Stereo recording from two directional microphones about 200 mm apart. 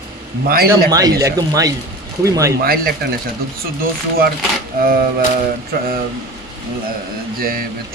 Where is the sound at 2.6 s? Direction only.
45° right (ahead or behind).